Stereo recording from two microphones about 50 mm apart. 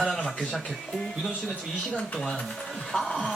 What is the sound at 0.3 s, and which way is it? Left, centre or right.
Speech, centre.